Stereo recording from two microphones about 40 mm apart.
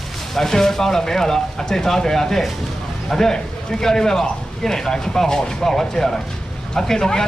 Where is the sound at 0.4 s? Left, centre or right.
Centre.